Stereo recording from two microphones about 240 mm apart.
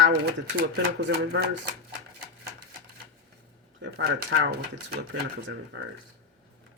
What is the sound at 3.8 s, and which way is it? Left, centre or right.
Speech, right.